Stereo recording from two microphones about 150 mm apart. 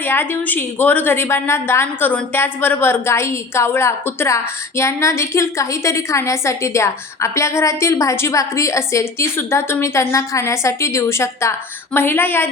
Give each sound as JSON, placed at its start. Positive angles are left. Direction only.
{"t": 0.0, "sound": "a woman's voice", "side_deg": 15}